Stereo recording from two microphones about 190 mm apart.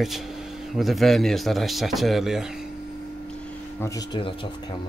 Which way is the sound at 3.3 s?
10° left (ahead or behind).